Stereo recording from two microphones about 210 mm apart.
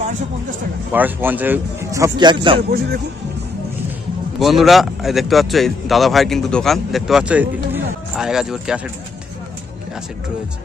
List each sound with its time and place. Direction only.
0.9 s speech: 10° right (ahead or behind)
2.6 s speech: 45° right (ahead or behind)
4.4 s speech: centre (ahead or behind)